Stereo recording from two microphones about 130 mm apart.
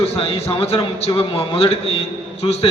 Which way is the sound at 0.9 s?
50° left (ahead or behind).